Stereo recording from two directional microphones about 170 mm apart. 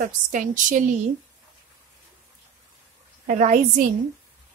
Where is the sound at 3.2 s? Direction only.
50° right (ahead or behind).